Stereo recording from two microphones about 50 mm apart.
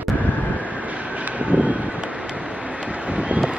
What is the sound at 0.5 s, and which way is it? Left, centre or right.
Vehicle, right.